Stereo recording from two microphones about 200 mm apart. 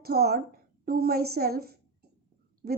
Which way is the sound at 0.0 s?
50° right (ahead or behind).